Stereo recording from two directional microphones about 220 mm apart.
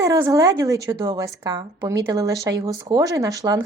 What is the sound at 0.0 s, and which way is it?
A woman's voice, 15° right (ahead or behind).